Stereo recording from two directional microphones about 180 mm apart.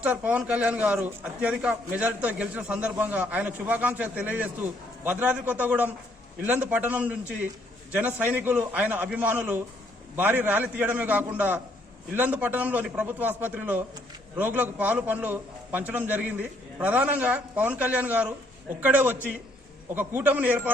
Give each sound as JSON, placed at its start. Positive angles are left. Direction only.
{"t": 0.0, "sound": "a man's voice", "side_deg": -10}